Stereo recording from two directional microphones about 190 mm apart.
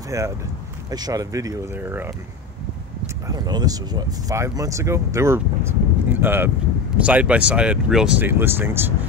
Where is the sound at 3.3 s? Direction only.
20° right (ahead or behind).